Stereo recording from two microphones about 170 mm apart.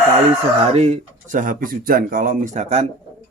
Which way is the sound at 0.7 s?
40° right (ahead or behind).